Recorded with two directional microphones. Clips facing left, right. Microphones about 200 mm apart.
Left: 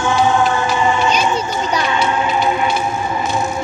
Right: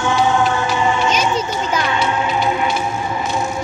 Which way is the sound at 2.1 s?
45° left (ahead or behind).